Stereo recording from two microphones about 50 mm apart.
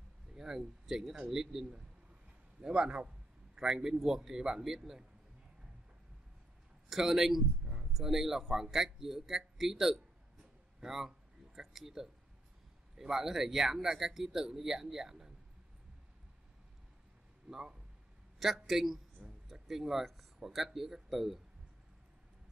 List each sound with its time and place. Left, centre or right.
0.3 s a man's voice: centre
6.9 s speech: centre
7.6 s a sound: centre
7.9 s speech: centre
17.5 s a man's voice: centre
19.2 s a sound: centre
20.3 s speech: centre